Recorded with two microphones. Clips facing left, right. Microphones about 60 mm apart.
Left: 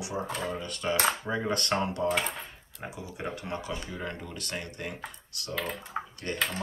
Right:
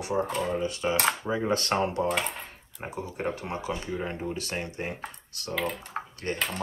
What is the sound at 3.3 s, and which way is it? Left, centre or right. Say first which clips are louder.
Speech: right 2 dB; right.